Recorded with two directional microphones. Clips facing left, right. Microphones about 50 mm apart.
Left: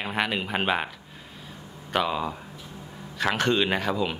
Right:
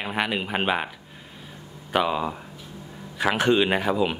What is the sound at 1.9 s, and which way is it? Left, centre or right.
Speech, centre.